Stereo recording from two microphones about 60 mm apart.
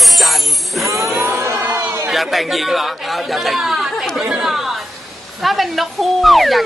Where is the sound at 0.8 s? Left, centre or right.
Right.